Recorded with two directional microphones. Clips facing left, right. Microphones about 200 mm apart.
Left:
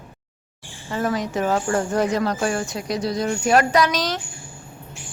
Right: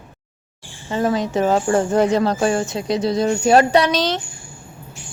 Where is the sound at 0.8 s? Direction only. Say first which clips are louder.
Right 4 dB; 25° right (ahead or behind).